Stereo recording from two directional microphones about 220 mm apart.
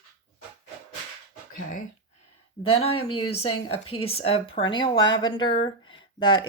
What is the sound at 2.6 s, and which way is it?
Speech, 25° left (ahead or behind).